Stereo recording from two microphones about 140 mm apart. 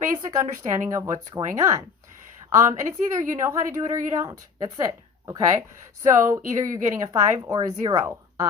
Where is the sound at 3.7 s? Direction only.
55° right (ahead or behind).